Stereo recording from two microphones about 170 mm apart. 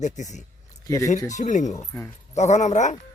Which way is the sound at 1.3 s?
45° left (ahead or behind).